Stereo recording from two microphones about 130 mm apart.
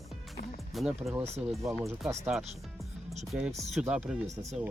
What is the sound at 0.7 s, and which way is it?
Speech, centre (ahead or behind).